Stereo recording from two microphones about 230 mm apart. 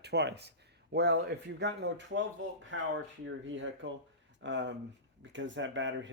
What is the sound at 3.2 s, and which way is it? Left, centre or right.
Speech, right.